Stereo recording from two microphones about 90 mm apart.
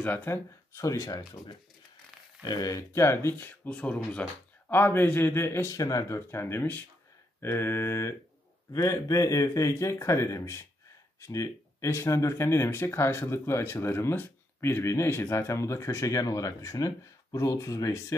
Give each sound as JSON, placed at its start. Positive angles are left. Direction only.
{"t": 0.0, "sound": "speech", "side_deg": 20}
{"t": 0.7, "sound": "speech", "side_deg": 35}
{"t": 2.4, "sound": "speech", "side_deg": 50}
{"t": 2.7, "sound": "speech", "side_deg": 30}
{"t": 4.6, "sound": "speech", "side_deg": 25}
{"t": 6.1, "sound": "speech", "side_deg": 25}